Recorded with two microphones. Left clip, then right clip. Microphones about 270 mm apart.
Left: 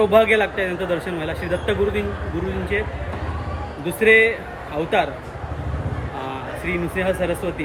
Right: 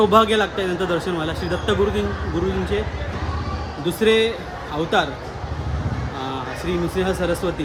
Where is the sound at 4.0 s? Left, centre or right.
Centre.